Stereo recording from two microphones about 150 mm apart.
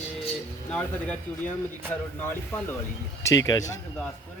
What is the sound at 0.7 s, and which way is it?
Speech, 10° left (ahead or behind).